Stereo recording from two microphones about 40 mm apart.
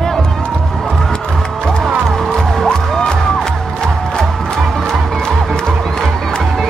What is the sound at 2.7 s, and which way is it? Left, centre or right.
Music, centre.